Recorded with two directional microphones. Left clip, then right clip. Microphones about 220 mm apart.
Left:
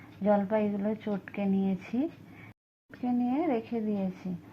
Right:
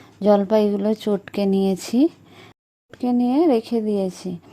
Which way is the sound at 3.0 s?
45° right (ahead or behind).